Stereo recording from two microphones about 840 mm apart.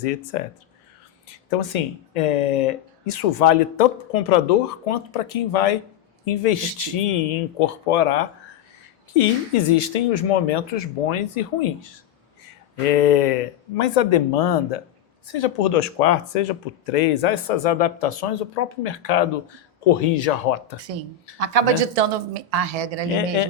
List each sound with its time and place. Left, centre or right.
0.0 s speech: left
1.5 s speech: left
12.8 s speech: left
21.3 s speech: right